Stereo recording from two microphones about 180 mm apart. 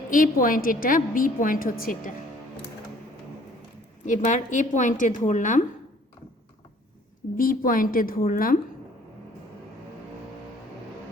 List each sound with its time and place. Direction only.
0.1 s a woman's voice: 50° left (ahead or behind)
4.0 s a woman's voice: 45° left (ahead or behind)
7.3 s a woman's voice: 50° left (ahead or behind)